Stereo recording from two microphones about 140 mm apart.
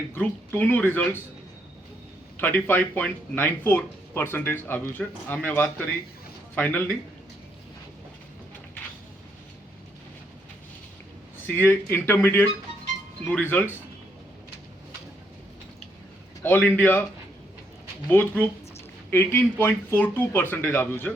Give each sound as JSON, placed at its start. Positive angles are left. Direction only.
{"t": 0.1, "sound": "speech", "side_deg": 15}
{"t": 2.4, "sound": "speech", "side_deg": 15}
{"t": 11.4, "sound": "speech", "side_deg": 15}
{"t": 16.4, "sound": "speech", "side_deg": 10}
{"t": 18.1, "sound": "speech", "side_deg": 15}